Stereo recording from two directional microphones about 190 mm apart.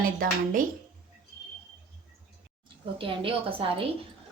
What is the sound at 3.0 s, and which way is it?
Speech, 25° right (ahead or behind).